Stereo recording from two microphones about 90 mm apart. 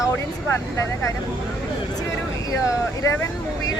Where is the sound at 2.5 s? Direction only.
35° left (ahead or behind).